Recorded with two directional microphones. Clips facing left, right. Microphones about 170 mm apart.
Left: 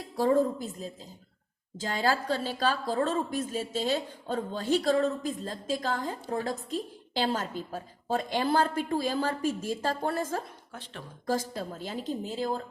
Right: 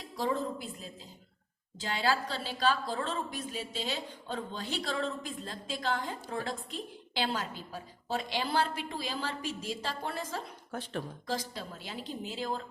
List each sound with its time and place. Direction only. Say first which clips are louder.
0.2 s a woman's voice: left 8 dB; 45° left (ahead or behind)
10.7 s speech: right 7 dB; 45° right (ahead or behind)
11.3 s a woman's voice: left 11 dB; 45° left (ahead or behind)